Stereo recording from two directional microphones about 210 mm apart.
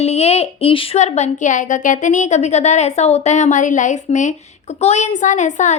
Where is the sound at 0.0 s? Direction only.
30° left (ahead or behind).